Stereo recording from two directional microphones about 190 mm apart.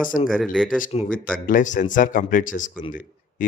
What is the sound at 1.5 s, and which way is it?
Speech, 45° left (ahead or behind).